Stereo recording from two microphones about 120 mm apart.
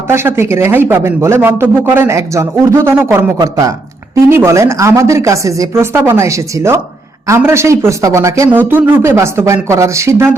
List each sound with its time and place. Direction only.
0.1 s speech: 20° right (ahead or behind)
3.3 s speech: 30° right (ahead or behind)